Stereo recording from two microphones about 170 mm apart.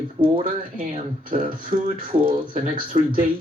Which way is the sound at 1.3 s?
55° right (ahead or behind).